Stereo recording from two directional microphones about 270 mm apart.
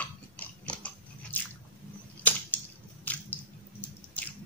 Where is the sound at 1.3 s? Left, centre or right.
Centre.